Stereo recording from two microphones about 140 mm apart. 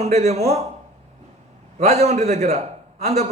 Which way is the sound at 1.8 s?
50° right (ahead or behind).